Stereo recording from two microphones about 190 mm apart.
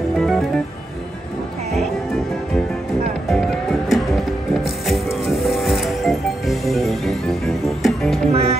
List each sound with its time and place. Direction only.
0.2 s music: centre (ahead or behind)
3.3 s music: centre (ahead or behind)
8.3 s music: 30° right (ahead or behind)